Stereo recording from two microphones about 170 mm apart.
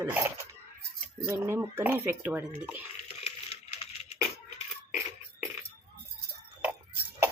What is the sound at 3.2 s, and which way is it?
Coin, 35° left (ahead or behind).